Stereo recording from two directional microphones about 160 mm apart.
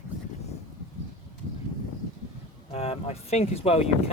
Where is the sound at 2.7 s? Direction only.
40° left (ahead or behind).